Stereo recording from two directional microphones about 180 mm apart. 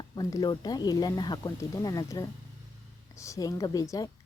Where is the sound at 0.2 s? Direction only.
20° left (ahead or behind).